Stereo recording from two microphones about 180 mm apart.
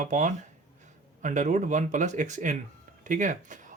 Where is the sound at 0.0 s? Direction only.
45° right (ahead or behind).